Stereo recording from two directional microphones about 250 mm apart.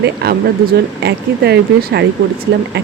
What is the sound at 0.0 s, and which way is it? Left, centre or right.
Speech, right.